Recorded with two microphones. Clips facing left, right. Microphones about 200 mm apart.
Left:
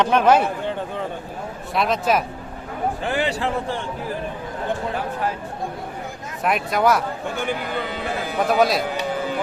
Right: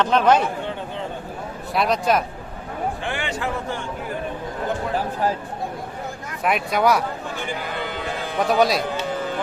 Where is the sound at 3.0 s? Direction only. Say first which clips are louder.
Left 4 dB; 35° left (ahead or behind).